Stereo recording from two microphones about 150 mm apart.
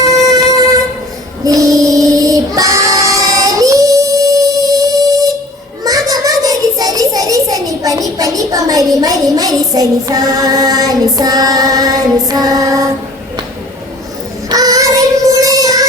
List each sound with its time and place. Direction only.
0.1 s music: 25° right (ahead or behind)
1.5 s child singing: 25° right (ahead or behind)
5.8 s a sound: 25° right (ahead or behind)
14.5 s child singing: 25° right (ahead or behind)